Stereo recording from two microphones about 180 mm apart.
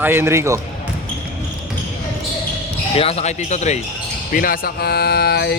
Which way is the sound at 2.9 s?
35° left (ahead or behind).